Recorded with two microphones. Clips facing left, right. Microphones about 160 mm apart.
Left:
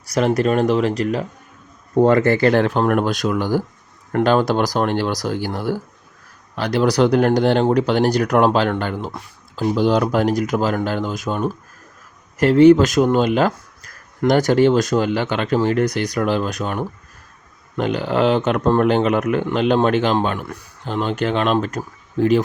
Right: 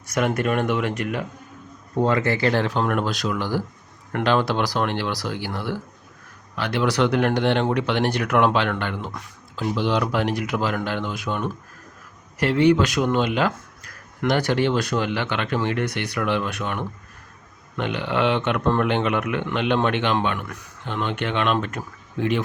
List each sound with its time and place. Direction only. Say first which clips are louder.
0.0 s speech: left 5 dB; 35° left (ahead or behind)
2.0 s speech: left 7 dB; 50° left (ahead or behind)